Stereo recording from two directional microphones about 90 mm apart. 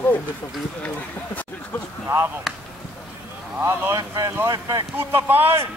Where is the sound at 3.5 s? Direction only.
25° right (ahead or behind).